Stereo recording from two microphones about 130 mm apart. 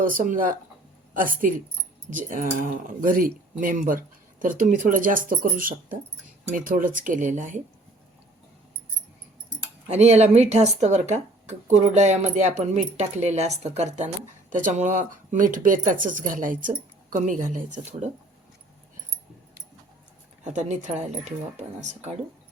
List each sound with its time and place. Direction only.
0.0 s speech: 90° right
9.9 s speech: 60° right (ahead or behind)
14.5 s speech: 75° right (ahead or behind)
20.4 s speech: 65° right (ahead or behind)